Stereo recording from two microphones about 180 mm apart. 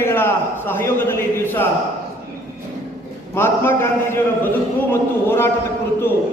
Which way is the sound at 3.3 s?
15° left (ahead or behind).